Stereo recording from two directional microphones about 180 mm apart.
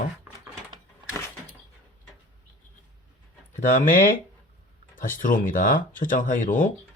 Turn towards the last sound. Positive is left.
turn(degrees=50)  # may be behind; listen again after turning